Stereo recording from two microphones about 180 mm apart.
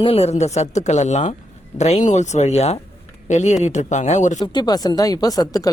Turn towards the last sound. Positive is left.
turn(degrees=20)  # may be behind; listen again after turning